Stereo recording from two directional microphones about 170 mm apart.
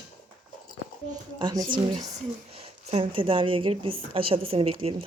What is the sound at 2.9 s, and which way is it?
A woman's voice, 30° right (ahead or behind).